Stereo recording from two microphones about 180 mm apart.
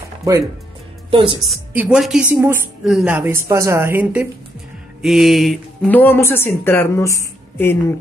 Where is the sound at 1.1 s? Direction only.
30° right (ahead or behind).